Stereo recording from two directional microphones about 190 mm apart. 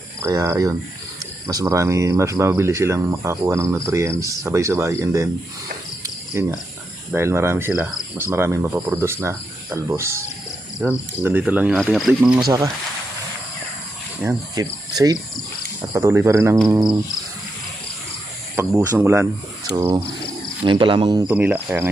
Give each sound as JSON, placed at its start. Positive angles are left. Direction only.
{"t": 0.2, "sound": "speech", "side_deg": -15}
{"t": 6.0, "sound": "cricket", "side_deg": -15}
{"t": 7.1, "sound": "speech", "side_deg": -15}
{"t": 12.5, "sound": "speech", "side_deg": -20}
{"t": 14.3, "sound": "cricket", "side_deg": -20}
{"t": 15.9, "sound": "speech", "side_deg": -15}
{"t": 18.5, "sound": "speech", "side_deg": -15}
{"t": 20.7, "sound": "cricket", "side_deg": -25}
{"t": 21.2, "sound": "speech", "side_deg": -10}